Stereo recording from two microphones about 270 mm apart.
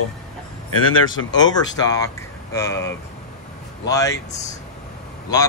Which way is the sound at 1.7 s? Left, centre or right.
Centre.